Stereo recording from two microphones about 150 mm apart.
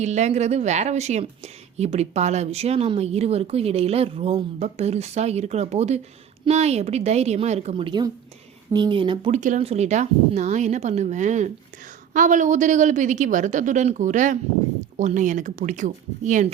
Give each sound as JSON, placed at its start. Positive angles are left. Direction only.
{"t": 0.0, "sound": "a woman's voice", "side_deg": -50}
{"t": 9.3, "sound": "a woman's voice", "side_deg": -55}